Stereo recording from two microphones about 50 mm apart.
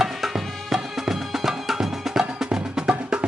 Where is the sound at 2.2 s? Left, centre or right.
Centre.